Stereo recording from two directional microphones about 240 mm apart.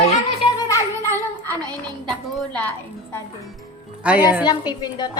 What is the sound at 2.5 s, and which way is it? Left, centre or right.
Speech, centre.